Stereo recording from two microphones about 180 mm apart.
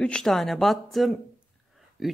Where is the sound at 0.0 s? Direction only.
5° left (ahead or behind).